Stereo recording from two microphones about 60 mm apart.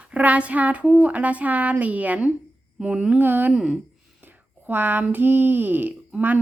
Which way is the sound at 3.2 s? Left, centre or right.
Right.